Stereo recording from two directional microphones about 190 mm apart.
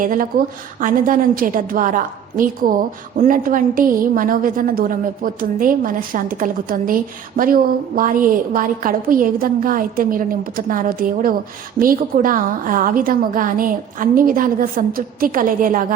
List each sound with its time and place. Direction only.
0.0 s a woman's voice: 45° right (ahead or behind)